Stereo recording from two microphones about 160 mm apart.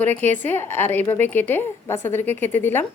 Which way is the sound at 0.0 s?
10° left (ahead or behind).